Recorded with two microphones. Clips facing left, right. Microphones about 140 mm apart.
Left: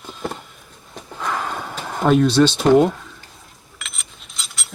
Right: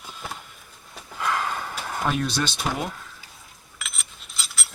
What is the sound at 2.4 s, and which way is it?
Speech, 5° right (ahead or behind).